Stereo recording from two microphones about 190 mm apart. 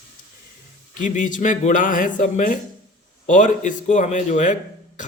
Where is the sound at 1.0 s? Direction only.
45° left (ahead or behind).